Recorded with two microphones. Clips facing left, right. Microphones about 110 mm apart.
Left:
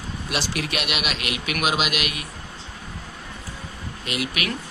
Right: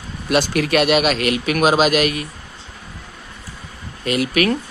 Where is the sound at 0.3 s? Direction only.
50° right (ahead or behind).